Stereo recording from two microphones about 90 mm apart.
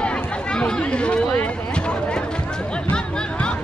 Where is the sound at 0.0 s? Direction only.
10° left (ahead or behind).